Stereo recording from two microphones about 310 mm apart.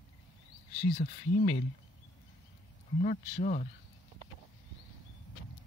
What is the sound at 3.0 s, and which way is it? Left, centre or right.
Speech, left.